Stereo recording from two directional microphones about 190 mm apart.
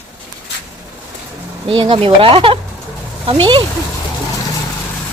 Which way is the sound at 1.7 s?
25° right (ahead or behind).